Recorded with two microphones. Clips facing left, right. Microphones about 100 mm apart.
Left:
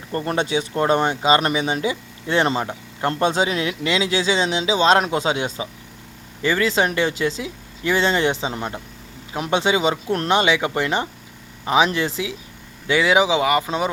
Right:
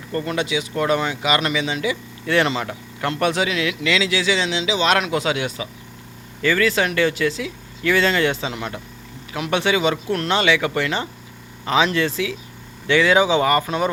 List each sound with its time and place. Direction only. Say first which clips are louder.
0.1 s speech: left 1 dB; 30° left (ahead or behind)
1.4 s speech: left 1 dB; 45° left (ahead or behind)
1.8 s speech: even; 25° left (ahead or behind)